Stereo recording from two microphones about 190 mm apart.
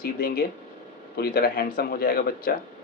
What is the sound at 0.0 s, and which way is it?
Speech, 50° left (ahead or behind).